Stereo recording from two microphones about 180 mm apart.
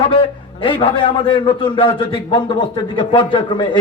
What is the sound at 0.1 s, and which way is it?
A man's voice, 30° left (ahead or behind).